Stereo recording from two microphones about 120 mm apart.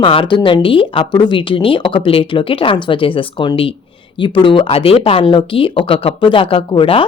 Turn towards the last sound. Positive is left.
turn(degrees=45)  # may be behind; listen again after turning